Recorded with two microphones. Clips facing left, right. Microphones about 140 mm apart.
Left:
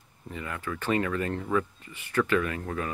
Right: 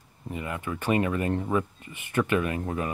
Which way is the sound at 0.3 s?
20° right (ahead or behind).